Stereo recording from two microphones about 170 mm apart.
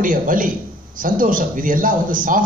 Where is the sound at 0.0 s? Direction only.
55° right (ahead or behind).